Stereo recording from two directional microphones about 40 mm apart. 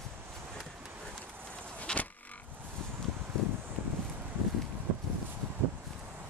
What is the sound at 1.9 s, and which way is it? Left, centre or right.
Insect, left.